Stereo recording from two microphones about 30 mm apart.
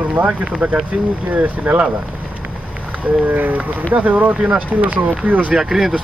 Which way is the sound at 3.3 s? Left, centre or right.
Right.